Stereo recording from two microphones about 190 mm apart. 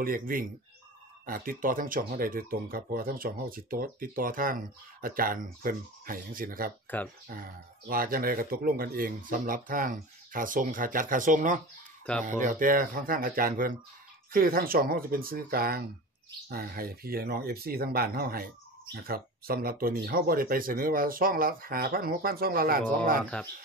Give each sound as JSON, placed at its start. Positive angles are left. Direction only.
{"t": 0.0, "sound": "speech", "side_deg": -50}